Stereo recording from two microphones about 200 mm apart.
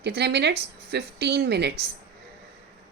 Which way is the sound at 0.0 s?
55° right (ahead or behind).